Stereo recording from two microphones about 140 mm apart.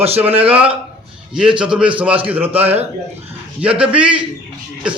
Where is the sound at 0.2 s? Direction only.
10° right (ahead or behind).